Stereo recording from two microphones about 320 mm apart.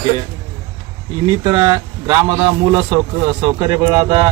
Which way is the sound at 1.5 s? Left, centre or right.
Centre.